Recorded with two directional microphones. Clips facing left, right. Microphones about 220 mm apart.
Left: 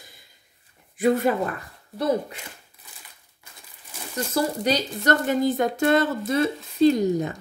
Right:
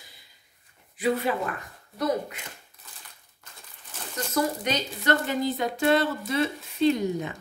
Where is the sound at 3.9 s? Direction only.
10° left (ahead or behind).